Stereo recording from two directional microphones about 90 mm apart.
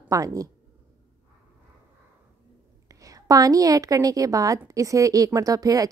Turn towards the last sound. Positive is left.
turn(degrees=-40)  # may be behind; listen again after turning